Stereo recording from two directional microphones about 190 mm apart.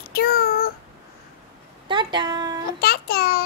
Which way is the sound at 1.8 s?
25° right (ahead or behind).